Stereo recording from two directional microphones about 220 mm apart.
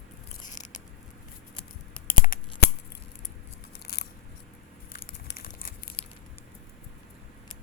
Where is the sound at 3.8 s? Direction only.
45° left (ahead or behind).